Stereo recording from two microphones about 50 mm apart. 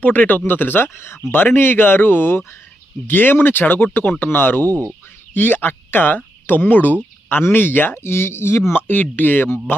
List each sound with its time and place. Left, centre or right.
0.0 s speech: left
0.9 s speech: left
1.3 s speech: left
8.7 s speech: left